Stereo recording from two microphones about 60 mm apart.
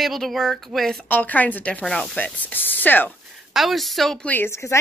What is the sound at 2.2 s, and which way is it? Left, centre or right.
Speech, left.